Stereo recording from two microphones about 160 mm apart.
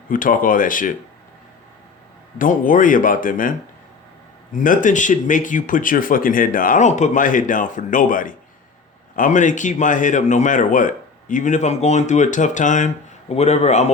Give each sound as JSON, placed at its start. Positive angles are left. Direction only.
{"t": 0.1, "sound": "speech", "side_deg": 60}
{"t": 2.4, "sound": "speech", "side_deg": 55}
{"t": 4.5, "sound": "speech", "side_deg": 55}